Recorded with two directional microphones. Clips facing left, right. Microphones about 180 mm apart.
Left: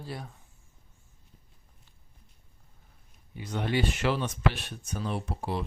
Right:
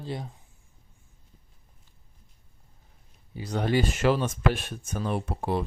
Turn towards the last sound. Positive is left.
turn(degrees=-55)  # may be behind; listen again after turning